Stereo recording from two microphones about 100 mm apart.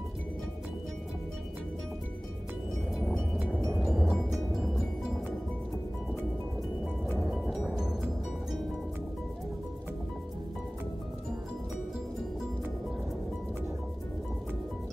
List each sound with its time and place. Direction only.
3.3 s music: 10° right (ahead or behind)
3.6 s music: centre (ahead or behind)
7.4 s music: 5° right (ahead or behind)